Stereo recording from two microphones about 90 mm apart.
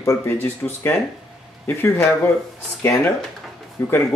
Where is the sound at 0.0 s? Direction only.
30° left (ahead or behind).